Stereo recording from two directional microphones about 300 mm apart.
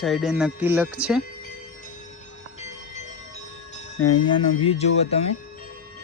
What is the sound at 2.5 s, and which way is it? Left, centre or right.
Train, left.